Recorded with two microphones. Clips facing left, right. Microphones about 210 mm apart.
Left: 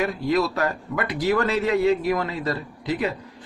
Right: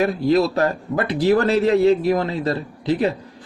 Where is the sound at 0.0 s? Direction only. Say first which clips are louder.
Right 5 dB; 30° right (ahead or behind).